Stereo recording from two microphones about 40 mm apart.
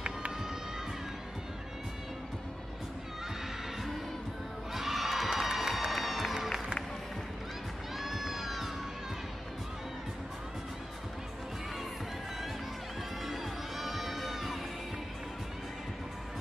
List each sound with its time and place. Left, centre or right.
4.7 s crowd: centre
5.4 s music: centre
8.0 s cat: centre
13.2 s music: centre